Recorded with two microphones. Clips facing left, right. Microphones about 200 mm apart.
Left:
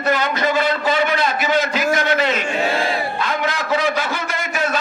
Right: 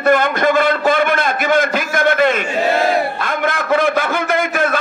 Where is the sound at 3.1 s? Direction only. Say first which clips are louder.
Right 2 dB; 50° right (ahead or behind).